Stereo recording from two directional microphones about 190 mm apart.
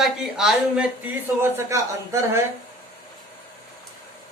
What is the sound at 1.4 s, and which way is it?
Speech, 15° right (ahead or behind).